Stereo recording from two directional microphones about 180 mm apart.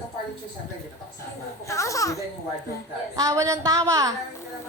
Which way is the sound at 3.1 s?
20° right (ahead or behind).